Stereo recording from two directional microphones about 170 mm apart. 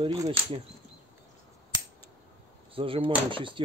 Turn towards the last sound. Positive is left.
turn(degrees=-30)  # may be behind; listen again after turning